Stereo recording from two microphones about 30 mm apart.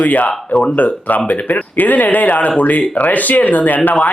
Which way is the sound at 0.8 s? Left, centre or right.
Left.